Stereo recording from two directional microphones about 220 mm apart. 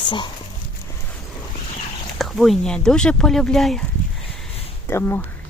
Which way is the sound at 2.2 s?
Centre (ahead or behind).